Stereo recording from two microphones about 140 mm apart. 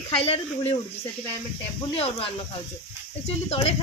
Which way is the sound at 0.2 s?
45° left (ahead or behind).